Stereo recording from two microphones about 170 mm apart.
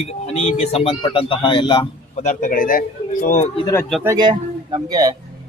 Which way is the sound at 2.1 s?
45° left (ahead or behind).